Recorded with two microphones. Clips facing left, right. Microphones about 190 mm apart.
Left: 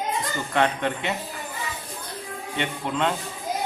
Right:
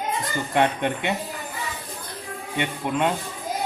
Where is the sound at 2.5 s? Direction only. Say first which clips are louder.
Right 2 dB; 15° right (ahead or behind).